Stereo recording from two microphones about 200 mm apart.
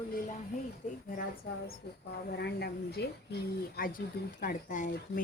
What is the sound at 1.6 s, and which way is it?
A woman's voice, 55° left (ahead or behind).